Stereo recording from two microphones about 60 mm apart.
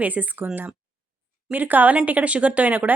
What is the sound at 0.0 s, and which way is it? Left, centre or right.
Speech, right.